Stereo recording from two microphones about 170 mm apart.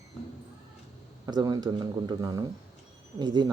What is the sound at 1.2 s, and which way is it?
Speech, 20° right (ahead or behind).